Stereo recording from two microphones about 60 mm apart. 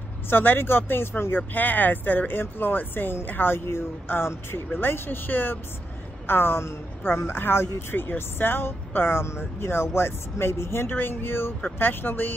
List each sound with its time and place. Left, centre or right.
0.3 s speech: left